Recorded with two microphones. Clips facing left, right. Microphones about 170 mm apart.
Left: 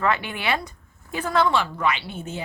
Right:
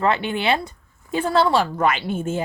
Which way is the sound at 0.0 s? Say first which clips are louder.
Right 4 dB; 30° right (ahead or behind).